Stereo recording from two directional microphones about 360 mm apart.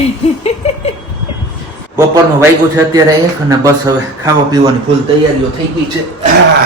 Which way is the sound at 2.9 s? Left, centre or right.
Centre.